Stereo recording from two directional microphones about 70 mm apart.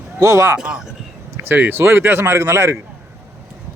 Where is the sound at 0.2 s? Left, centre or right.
Right.